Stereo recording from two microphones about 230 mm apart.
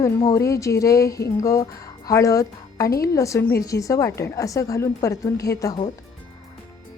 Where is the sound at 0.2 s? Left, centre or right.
Centre.